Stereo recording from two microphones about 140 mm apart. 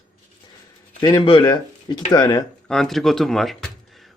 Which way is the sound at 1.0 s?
30° left (ahead or behind).